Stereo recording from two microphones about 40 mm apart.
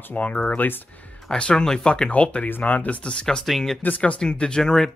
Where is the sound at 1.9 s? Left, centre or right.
Left.